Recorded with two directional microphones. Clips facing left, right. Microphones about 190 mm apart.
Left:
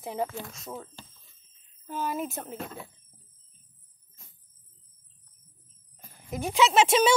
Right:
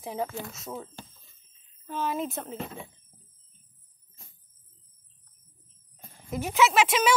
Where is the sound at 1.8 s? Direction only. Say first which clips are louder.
Right 1 dB; 5° left (ahead or behind).